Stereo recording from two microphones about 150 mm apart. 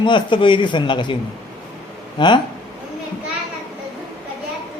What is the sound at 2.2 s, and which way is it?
Speech, 30° left (ahead or behind).